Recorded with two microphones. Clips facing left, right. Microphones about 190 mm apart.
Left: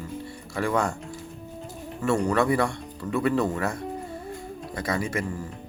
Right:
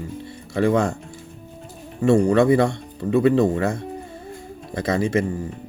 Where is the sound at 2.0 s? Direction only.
20° right (ahead or behind).